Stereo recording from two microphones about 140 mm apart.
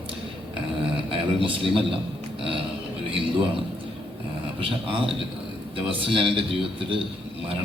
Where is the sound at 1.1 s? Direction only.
40° right (ahead or behind).